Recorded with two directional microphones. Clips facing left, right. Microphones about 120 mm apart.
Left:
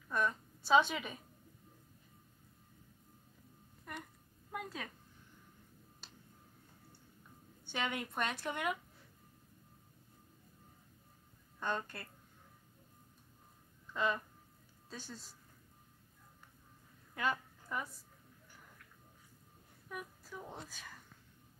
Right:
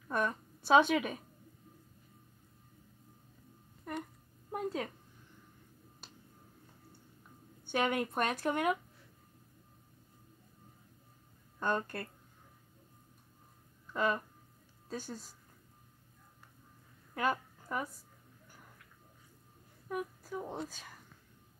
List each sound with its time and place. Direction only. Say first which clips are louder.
0.1 s a woman's voice: right 2 dB; 55° right (ahead or behind)
4.5 s a woman's voice: right 7 dB; 30° right (ahead or behind)
7.6 s speech: right 7 dB; 50° right (ahead or behind)
11.6 s speech: right 5 dB; 50° right (ahead or behind)
13.9 s speech: right 3 dB; 50° right (ahead or behind)
17.1 s a sound: right 4 dB; 50° right (ahead or behind)
19.9 s a woman's voice: right 9 dB; 50° right (ahead or behind)